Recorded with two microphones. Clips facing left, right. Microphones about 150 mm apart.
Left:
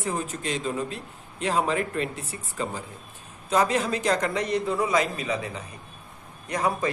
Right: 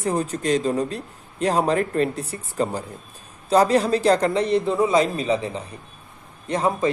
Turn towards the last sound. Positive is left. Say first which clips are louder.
# right 4 dB
turn(degrees=-25)  # may be behind; listen again after turning